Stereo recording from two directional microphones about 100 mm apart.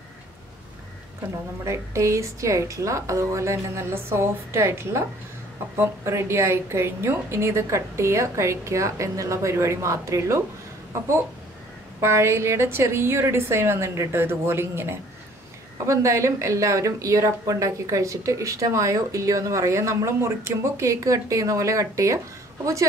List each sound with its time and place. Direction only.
1.6 s a woman's voice: 30° right (ahead or behind)
12.0 s a woman's voice: 25° right (ahead or behind)